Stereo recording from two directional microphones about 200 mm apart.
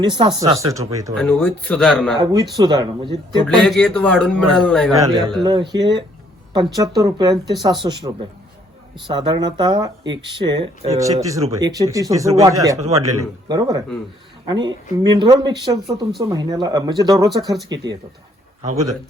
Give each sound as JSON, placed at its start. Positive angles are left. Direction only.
{"t": 0.0, "sound": "a man's voice", "side_deg": -25}
{"t": 1.1, "sound": "speech", "side_deg": 5}
{"t": 2.1, "sound": "speech", "side_deg": -20}
{"t": 3.4, "sound": "speech", "side_deg": 5}
{"t": 4.9, "sound": "a man's voice", "side_deg": -20}
{"t": 6.7, "sound": "a man's voice", "side_deg": -20}